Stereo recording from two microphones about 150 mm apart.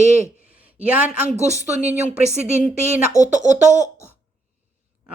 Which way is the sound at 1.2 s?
50° right (ahead or behind).